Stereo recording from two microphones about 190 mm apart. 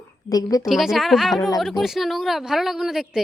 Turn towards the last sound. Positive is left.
turn(degrees=0)  # may be behind; listen again after turning